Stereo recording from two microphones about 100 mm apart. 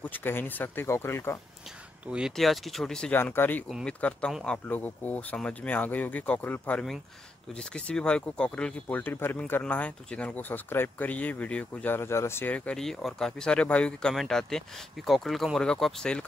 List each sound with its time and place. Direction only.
0.0 s speech: 20° left (ahead or behind)
2.0 s speech: 10° right (ahead or behind)
3.1 s speech: 20° left (ahead or behind)
12.5 s speech: 10° left (ahead or behind)